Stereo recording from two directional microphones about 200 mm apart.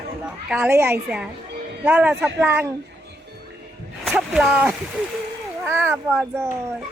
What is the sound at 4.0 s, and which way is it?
Speech, 5° right (ahead or behind).